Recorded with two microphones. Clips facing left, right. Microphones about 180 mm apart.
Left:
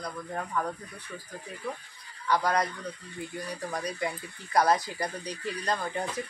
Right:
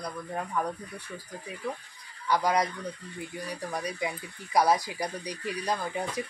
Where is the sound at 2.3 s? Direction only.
10° right (ahead or behind).